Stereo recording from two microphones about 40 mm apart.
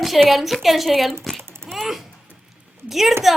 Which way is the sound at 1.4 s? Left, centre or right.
Right.